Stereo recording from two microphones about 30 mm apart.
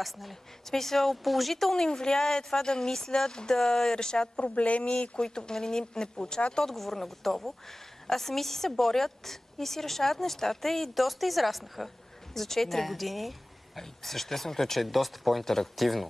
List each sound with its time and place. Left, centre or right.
0.0 s a woman's voice: centre
0.7 s a woman's voice: centre
1.8 s speech: left
4.4 s speech: left
5.1 s speech: left
6.6 s a woman's voice: centre
14.8 s a woman's voice: centre
15.4 s a woman's voice: centre